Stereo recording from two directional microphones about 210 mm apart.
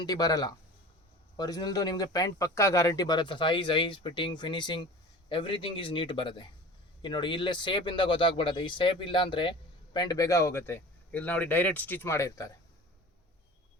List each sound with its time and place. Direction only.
0.0 s speech: 20° left (ahead or behind)